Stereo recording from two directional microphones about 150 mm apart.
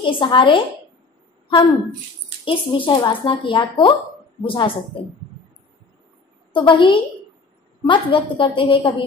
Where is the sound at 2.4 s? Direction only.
35° left (ahead or behind).